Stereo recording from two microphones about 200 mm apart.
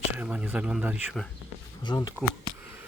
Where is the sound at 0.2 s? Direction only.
5° right (ahead or behind).